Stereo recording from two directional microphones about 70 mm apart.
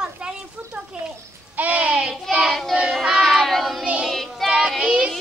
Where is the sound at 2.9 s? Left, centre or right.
Centre.